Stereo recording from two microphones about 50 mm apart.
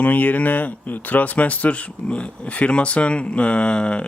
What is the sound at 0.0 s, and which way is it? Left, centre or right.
Speech, left.